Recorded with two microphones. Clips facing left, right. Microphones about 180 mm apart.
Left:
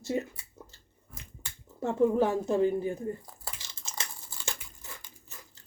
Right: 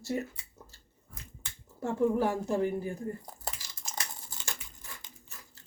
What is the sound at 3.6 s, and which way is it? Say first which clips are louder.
Crumpling: right 1 dB; 25° left (ahead or behind).